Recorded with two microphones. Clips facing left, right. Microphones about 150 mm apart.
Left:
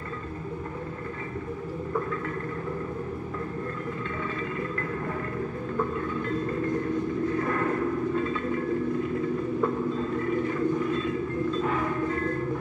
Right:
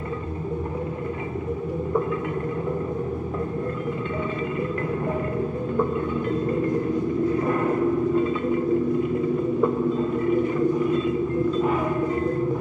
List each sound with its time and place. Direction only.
7.3 s vehicle: 15° right (ahead or behind)
9.6 s vehicle: 15° right (ahead or behind)